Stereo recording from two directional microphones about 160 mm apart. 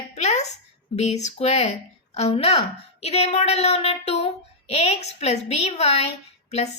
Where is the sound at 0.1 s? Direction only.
45° left (ahead or behind).